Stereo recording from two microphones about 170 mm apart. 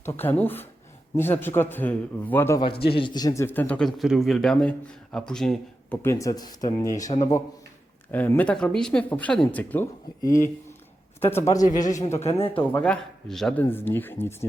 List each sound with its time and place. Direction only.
0.0 s speech: 10° left (ahead or behind)
2.9 s speech: 25° left (ahead or behind); by 6.0 s 5° left (ahead or behind)
6.0 s speech: 15° left (ahead or behind)
12.2 s a man's voice: 35° left (ahead or behind)
12.8 s a man's voice: 5° left (ahead or behind)